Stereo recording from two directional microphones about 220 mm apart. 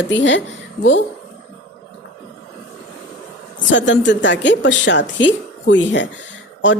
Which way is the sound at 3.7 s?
55° left (ahead or behind).